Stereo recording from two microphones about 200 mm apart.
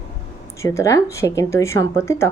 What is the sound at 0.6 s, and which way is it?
Speech, 15° left (ahead or behind).